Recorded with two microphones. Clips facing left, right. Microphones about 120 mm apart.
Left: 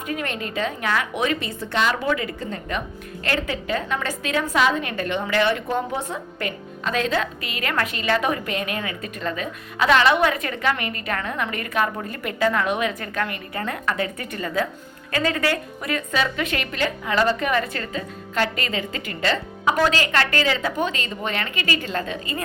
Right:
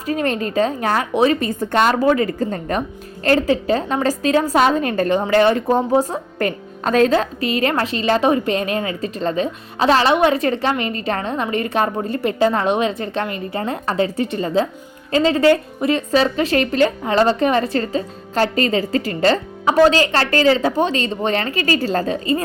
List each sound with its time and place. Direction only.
0.0 s a woman's voice: 35° right (ahead or behind)